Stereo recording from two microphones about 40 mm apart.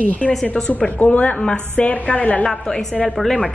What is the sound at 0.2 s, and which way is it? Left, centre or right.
Speech, left.